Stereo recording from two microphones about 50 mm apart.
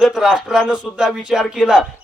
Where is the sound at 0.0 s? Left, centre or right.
Centre.